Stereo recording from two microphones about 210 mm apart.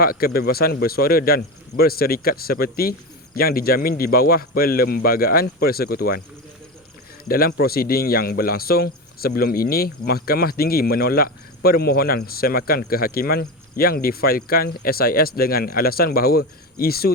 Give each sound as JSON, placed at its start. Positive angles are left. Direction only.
{"t": 0.0, "sound": "speech", "side_deg": 45}
{"t": 7.3, "sound": "speech", "side_deg": 45}